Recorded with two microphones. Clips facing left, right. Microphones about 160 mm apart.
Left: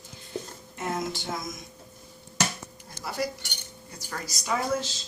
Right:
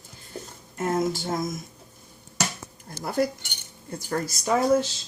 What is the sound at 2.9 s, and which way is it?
Speech, 50° right (ahead or behind).